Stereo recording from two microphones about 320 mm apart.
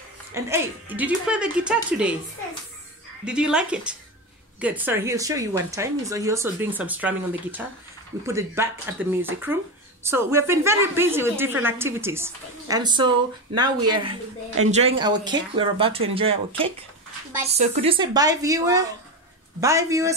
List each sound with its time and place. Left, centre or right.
0.3 s a woman's voice: centre
3.3 s a woman's voice: centre